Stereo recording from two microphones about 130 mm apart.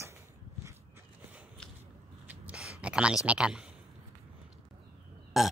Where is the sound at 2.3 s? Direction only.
10° right (ahead or behind).